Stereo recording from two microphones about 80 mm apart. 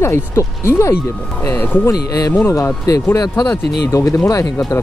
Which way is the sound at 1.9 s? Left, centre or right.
Left.